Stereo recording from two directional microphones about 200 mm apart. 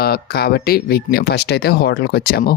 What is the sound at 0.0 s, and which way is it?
Speech, 50° left (ahead or behind).